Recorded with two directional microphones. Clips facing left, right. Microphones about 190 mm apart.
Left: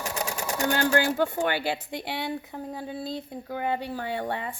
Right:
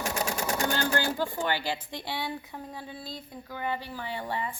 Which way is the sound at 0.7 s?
60° left (ahead or behind).